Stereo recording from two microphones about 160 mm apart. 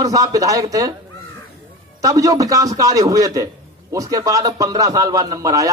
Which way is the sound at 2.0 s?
20° right (ahead or behind).